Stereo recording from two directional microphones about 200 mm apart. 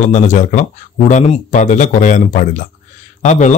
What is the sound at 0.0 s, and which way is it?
Speech, 35° left (ahead or behind).